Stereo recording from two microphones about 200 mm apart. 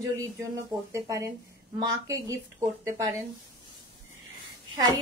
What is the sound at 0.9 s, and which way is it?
Speech, 15° right (ahead or behind).